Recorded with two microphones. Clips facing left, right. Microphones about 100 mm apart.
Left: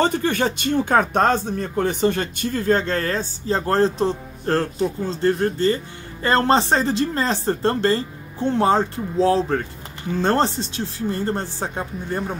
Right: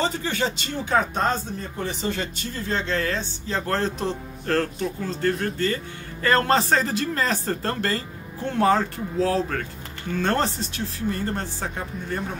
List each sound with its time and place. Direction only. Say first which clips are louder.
0.0 s speech: left 5 dB; 55° left (ahead or behind); by 12.2 s 35° left (ahead or behind)